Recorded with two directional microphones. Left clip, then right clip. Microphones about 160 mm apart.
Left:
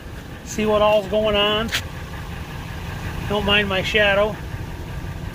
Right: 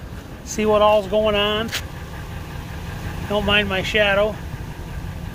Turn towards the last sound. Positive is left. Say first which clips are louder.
# even
turn(degrees=0)  # may be behind; listen again after turning